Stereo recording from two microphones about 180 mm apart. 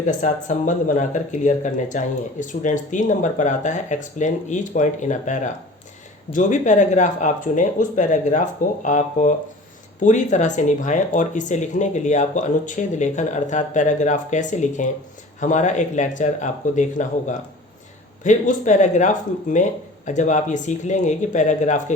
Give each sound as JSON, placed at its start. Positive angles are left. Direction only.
{"t": 0.1, "sound": "speech", "side_deg": 45}